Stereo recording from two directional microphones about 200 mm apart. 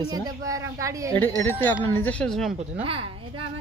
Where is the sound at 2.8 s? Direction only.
25° right (ahead or behind).